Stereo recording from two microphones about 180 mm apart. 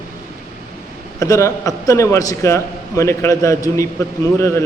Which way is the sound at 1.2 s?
20° left (ahead or behind).